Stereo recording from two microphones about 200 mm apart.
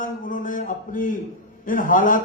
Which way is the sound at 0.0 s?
40° left (ahead or behind).